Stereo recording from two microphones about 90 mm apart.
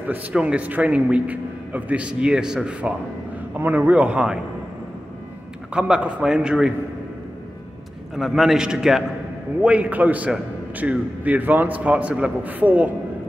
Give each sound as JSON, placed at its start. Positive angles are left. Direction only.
{"t": 0.0, "sound": "speech", "side_deg": -15}
{"t": 5.7, "sound": "speech", "side_deg": -10}
{"t": 8.2, "sound": "a man's voice", "side_deg": -5}